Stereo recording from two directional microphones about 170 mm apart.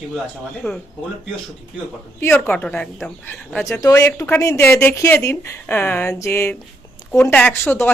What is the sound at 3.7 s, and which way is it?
Speech, 20° left (ahead or behind).